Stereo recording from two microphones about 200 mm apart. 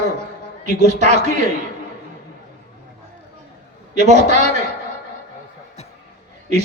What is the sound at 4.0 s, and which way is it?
Speech, 35° right (ahead or behind).